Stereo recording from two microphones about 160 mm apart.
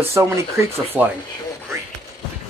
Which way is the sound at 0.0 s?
15° right (ahead or behind).